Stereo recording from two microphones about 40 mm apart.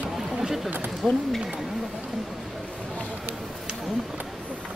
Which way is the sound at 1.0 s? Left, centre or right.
Centre.